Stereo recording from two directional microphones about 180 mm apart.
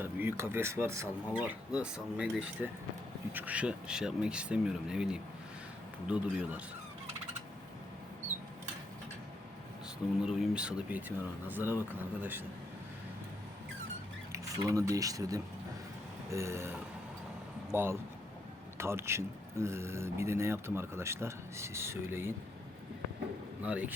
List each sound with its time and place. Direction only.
0.0 s speech: 10° right (ahead or behind)
10.2 s speech: 5° right (ahead or behind)
14.3 s speech: 20° right (ahead or behind)
23.6 s speech: 10° right (ahead or behind)